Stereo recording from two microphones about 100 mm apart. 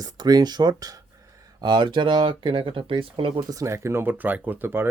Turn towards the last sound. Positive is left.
turn(degrees=-20)  # may be behind; listen again after turning